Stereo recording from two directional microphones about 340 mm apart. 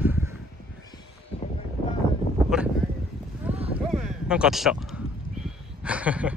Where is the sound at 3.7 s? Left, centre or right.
Centre.